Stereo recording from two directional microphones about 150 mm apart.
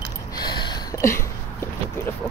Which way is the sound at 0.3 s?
30° left (ahead or behind).